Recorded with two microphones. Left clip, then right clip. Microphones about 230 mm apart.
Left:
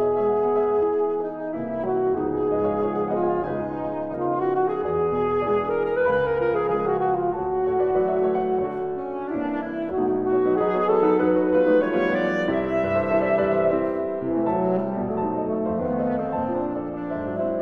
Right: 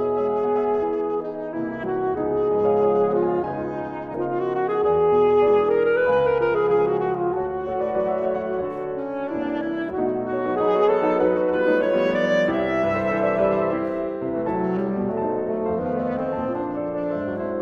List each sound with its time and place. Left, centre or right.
0.0 s music: right
2.0 s music: right
4.6 s music: right
10.3 s music: right